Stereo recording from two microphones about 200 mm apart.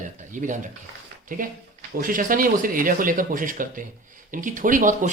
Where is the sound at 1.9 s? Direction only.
45° right (ahead or behind).